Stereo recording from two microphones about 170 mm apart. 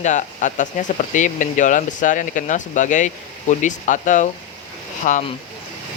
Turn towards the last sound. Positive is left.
turn(degrees=50)  # may be behind; listen again after turning